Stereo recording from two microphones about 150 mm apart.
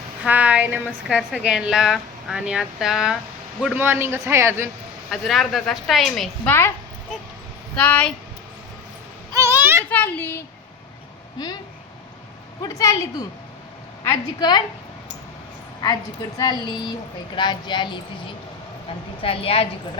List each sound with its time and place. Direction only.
0.3 s a woman's voice: 10° right (ahead or behind)
5.1 s a woman's voice: centre (ahead or behind)
6.5 s speech: 15° left (ahead or behind)
7.8 s speech: 10° left (ahead or behind)
9.3 s children playing: 20° right (ahead or behind)
9.9 s speech: 10° left (ahead or behind)
12.6 s a woman's voice: 20° left (ahead or behind)
16.4 s a woman's voice: 30° left (ahead or behind)